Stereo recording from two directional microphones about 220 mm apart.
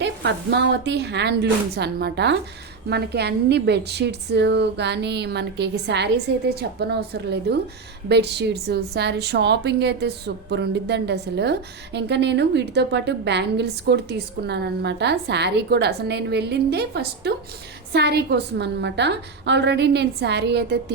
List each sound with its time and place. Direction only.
0.0 s a woman's voice: 50° right (ahead or behind)